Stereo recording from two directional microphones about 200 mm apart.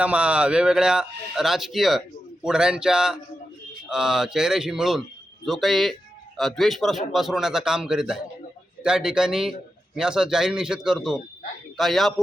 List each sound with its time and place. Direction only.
0.0 s speech: 5° right (ahead or behind)